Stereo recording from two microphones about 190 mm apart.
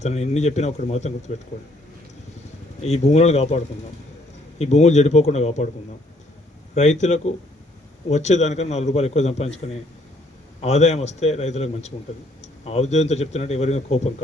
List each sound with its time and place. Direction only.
0.0 s a man's voice: 35° left (ahead or behind)
2.8 s a man's voice: 35° left (ahead or behind)
6.7 s a man's voice: 40° left (ahead or behind)